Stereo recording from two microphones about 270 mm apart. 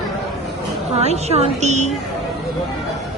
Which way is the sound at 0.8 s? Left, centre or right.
Right.